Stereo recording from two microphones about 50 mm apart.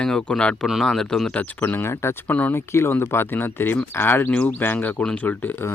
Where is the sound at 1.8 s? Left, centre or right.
Left.